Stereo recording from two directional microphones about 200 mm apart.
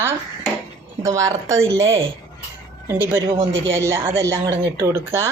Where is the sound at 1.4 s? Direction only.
75° right (ahead or behind).